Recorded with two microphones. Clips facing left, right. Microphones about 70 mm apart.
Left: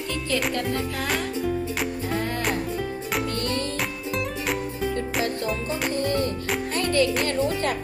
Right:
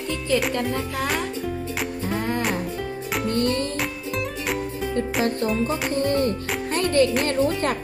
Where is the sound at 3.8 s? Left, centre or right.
Centre.